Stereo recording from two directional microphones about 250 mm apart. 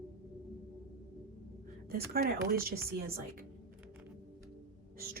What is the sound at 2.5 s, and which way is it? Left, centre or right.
Speech, right.